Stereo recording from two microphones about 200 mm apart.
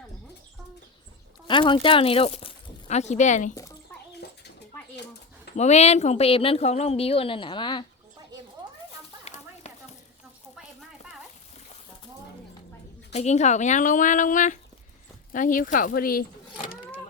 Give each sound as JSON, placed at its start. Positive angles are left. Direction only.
{"t": 1.5, "sound": "speech", "side_deg": 25}
{"t": 4.1, "sound": "bird", "side_deg": 55}
{"t": 5.5, "sound": "a woman's voice", "side_deg": 35}
{"t": 8.6, "sound": "a sound", "side_deg": -20}
{"t": 9.2, "sound": "a sound", "side_deg": 35}
{"t": 13.1, "sound": "speech", "side_deg": 35}